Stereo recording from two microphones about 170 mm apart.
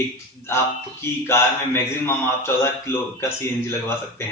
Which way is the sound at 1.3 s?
15° left (ahead or behind).